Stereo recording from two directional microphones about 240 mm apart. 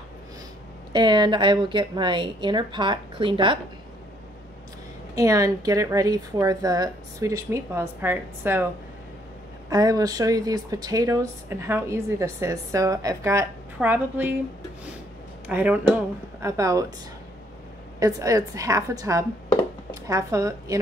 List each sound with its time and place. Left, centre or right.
0.9 s speech: centre
5.1 s speech: centre
9.7 s speech: centre
15.4 s speech: centre
17.9 s speech: centre